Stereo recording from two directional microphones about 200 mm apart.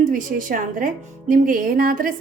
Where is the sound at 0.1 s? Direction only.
40° right (ahead or behind).